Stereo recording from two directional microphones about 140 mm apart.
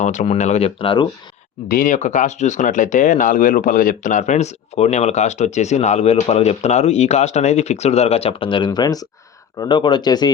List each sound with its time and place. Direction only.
0.0 s speech: 60° left (ahead or behind)
0.8 s speech: 35° left (ahead or behind)
1.6 s speech: 75° left (ahead or behind); by 10.3 s 30° left (ahead or behind)